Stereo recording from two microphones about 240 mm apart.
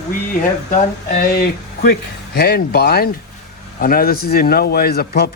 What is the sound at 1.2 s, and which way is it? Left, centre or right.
A man's voice, left.